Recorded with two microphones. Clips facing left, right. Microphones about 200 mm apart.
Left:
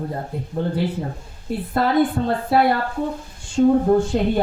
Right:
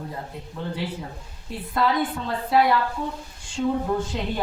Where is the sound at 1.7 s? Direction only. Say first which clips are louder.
Left 5 dB; 50° left (ahead or behind).